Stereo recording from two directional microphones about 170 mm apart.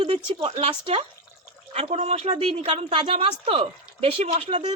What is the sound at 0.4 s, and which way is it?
A woman's voice, 35° right (ahead or behind).